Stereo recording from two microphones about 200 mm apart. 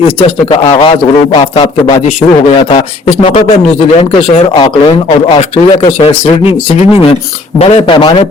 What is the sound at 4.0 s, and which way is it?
A man's voice, 30° left (ahead or behind).